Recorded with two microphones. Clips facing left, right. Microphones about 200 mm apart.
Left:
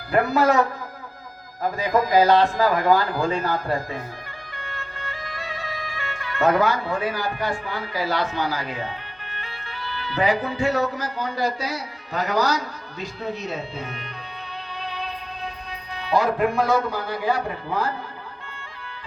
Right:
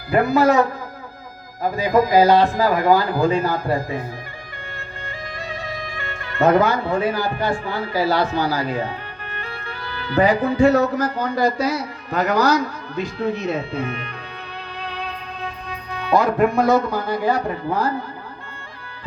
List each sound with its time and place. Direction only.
0.1 s a man's voice: centre (ahead or behind)
1.6 s speech: 5° right (ahead or behind)
5.4 s bagpipes: 15° right (ahead or behind)
6.2 s a man's voice: 25° right (ahead or behind); by 14.1 s 55° right (ahead or behind)
14.7 s music: 55° right (ahead or behind)
15.4 s speech: 55° right (ahead or behind)